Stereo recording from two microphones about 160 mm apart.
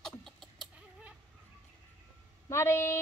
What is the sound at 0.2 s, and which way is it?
Chicken, centre (ahead or behind).